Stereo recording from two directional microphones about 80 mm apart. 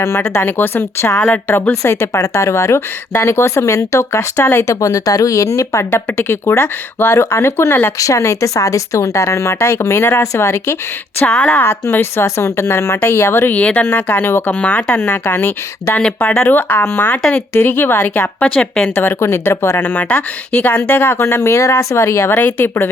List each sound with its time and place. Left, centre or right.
0.0 s speech: left
7.9 s speech: left
11.3 s speech: centre
11.6 s speech: left
14.9 s speech: left
16.0 s speech: centre
16.4 s speech: left
18.9 s speech: left